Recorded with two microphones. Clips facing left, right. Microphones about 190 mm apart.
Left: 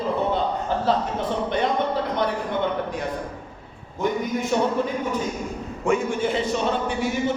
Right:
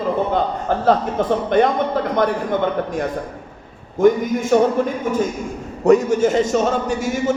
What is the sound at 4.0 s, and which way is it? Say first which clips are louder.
Speech: right 9 dB; 50° right (ahead or behind).